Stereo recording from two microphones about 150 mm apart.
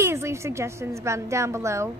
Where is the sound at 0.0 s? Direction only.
20° right (ahead or behind).